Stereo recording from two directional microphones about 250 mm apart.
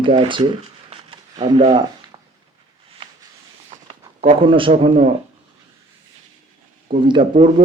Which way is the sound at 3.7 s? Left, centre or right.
Right.